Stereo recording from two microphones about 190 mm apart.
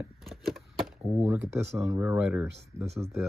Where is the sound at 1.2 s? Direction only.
15° right (ahead or behind).